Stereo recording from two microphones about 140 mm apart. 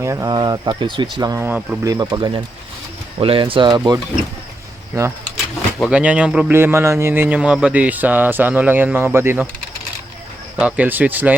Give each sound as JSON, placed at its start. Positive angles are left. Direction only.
{"t": 0.0, "sound": "speech", "side_deg": -20}
{"t": 1.5, "sound": "speech", "side_deg": -10}
{"t": 1.8, "sound": "speech", "side_deg": -25}
{"t": 5.8, "sound": "speech", "side_deg": -10}
{"t": 6.5, "sound": "speech", "side_deg": -15}
{"t": 10.6, "sound": "speech", "side_deg": -10}